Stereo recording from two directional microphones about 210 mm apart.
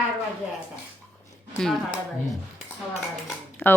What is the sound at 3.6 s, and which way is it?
Speech, 10° left (ahead or behind).